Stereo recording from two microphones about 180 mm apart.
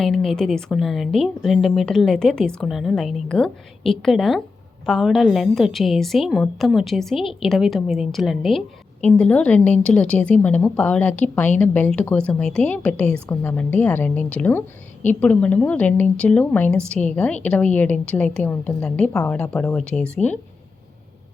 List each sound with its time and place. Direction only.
0.0 s a woman's voice: centre (ahead or behind)